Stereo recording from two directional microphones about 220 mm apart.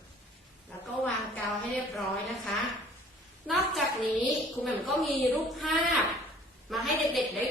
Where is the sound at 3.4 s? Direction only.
Centre (ahead or behind).